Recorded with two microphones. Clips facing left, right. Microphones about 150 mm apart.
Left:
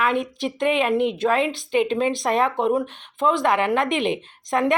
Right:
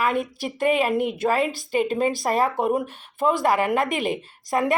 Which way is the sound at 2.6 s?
10° right (ahead or behind).